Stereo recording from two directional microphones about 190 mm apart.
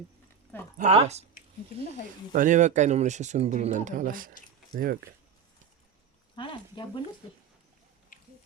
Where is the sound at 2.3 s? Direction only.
40° right (ahead or behind).